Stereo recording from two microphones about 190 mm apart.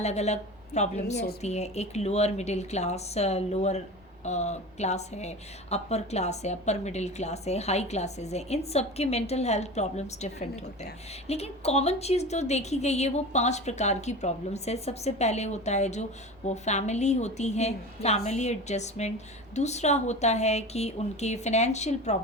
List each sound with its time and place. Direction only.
0.0 s a woman's voice: 35° left (ahead or behind)
1.1 s a woman's voice: 60° left (ahead or behind)
1.4 s a woman's voice: 35° left (ahead or behind)